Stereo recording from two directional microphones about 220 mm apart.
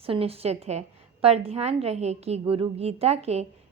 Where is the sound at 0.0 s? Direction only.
25° right (ahead or behind).